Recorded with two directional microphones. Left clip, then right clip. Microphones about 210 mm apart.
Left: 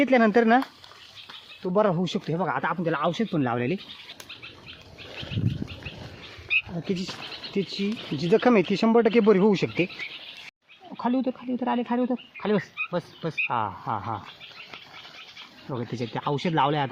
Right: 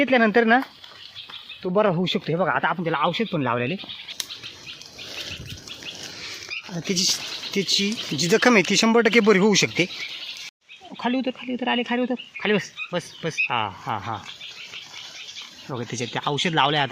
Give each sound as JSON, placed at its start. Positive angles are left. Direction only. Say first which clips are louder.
{"t": 0.0, "sound": "speech", "louder": "right 2 dB", "side_deg": 5}
{"t": 1.6, "sound": "speech", "louder": "right 2 dB", "side_deg": -5}
{"t": 6.8, "sound": "speech", "louder": "right 9 dB", "side_deg": 0}
{"t": 10.9, "sound": "speech", "louder": "right 1 dB", "side_deg": -5}
{"t": 15.7, "sound": "speech", "louder": "right 3 dB", "side_deg": -5}